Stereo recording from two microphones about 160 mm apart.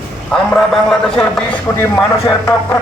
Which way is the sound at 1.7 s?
15° left (ahead or behind).